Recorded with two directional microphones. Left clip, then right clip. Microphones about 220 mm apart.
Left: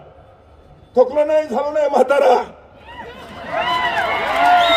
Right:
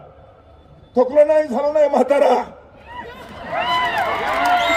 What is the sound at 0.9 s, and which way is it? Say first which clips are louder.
A man's voice: right 1 dB; 25° left (ahead or behind).